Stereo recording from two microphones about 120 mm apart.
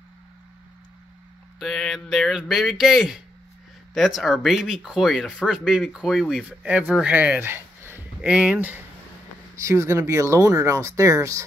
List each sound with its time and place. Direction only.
1.6 s speech: centre (ahead or behind)
9.6 s speech: 25° right (ahead or behind)